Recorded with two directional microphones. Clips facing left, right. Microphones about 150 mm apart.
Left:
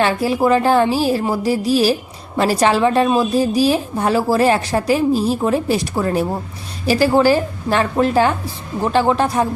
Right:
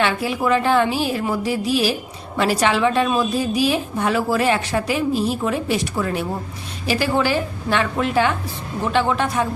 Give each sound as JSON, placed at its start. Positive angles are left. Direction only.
{"t": 0.0, "sound": "a woman's voice", "side_deg": 35}